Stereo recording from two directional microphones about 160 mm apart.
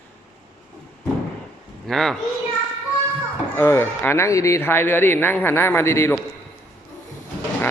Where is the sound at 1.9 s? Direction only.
5° left (ahead or behind).